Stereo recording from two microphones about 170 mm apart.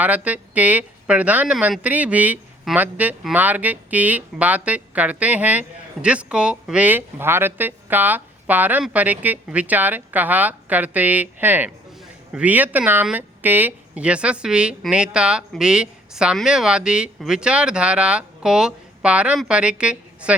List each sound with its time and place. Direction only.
0.0 s speech: 10° right (ahead or behind)